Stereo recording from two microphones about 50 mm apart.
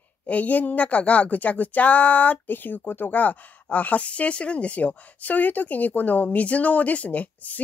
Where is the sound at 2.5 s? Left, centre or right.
Left.